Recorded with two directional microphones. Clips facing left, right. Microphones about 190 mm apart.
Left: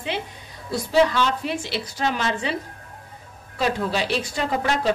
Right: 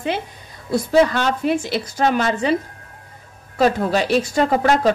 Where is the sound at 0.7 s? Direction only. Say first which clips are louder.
Right 4 dB; 50° right (ahead or behind).